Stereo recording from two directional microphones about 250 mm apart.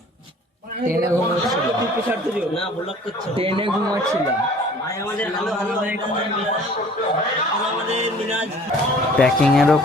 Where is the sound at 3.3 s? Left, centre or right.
Right.